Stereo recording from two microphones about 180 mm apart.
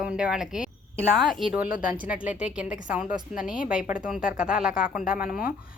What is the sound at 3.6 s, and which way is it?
Speech, 50° left (ahead or behind).